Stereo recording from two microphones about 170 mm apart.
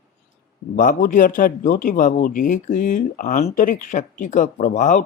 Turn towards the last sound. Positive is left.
turn(degrees=45)  # may be behind; listen again after turning